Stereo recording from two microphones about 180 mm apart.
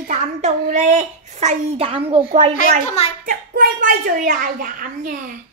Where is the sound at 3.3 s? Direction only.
50° right (ahead or behind).